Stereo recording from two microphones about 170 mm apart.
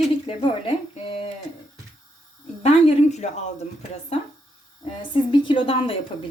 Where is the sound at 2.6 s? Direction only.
40° left (ahead or behind).